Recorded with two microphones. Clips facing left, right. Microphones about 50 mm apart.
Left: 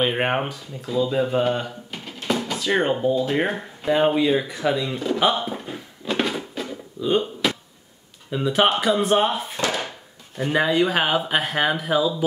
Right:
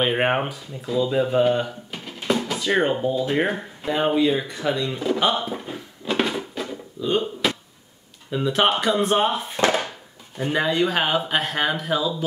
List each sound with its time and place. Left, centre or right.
0.0 s speech: centre
4.9 s speech: centre
5.2 s a sound: centre
8.3 s speech: centre
9.6 s a sound: right
10.3 s speech: centre